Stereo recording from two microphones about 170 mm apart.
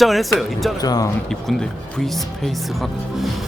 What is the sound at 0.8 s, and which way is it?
Speech, 20° left (ahead or behind).